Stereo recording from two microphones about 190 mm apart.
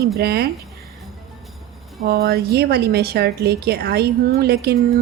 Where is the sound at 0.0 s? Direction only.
55° right (ahead or behind).